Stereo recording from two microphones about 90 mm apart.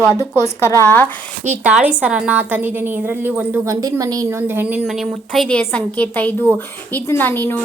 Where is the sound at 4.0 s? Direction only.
40° right (ahead or behind).